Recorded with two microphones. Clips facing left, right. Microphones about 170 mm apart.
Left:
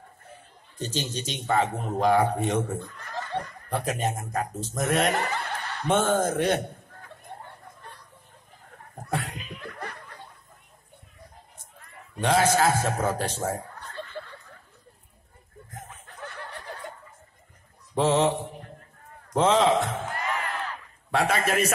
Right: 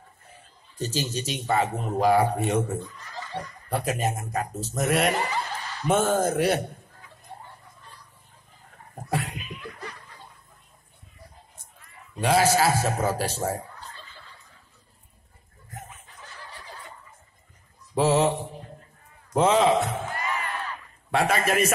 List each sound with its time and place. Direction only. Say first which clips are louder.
0.7 s speech: right 2 dB; 5° right (ahead or behind)
2.9 s speech: left 4 dB; 55° left (ahead or behind)
3.7 s speech: right 1 dB; 10° right (ahead or behind)
5.1 s chuckle: even; 55° left (ahead or behind)
5.9 s speech: right 1 dB; 10° right (ahead or behind)
7.0 s a sound: left 3 dB; 55° left (ahead or behind)
9.1 s laughter: right 2 dB; 10° right (ahead or behind)
9.6 s snicker: left 1 dB; 55° left (ahead or behind)
12.2 s speech: right 1 dB; 10° right (ahead or behind)
13.7 s snicker: left 8 dB; 60° left (ahead or behind)
16.1 s fowl: left 6 dB; 60° left (ahead or behind)
17.9 s speech: right 1 dB; 5° right (ahead or behind)
19.3 s speech: right 1 dB; 10° right (ahead or behind)
21.1 s a man's voice: right 1 dB; centre (ahead or behind)